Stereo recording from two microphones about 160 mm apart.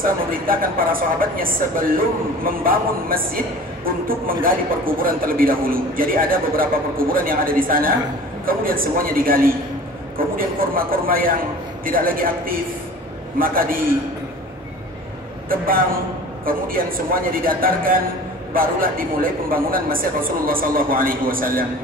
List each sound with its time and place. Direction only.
0.0 s a man's voice: 60° right (ahead or behind)
15.5 s a man's voice: 65° right (ahead or behind)